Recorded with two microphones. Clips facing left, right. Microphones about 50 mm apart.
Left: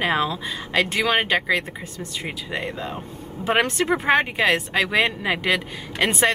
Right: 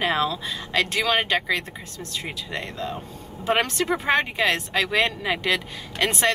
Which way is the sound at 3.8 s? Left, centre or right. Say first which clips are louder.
Left 3 dB; left.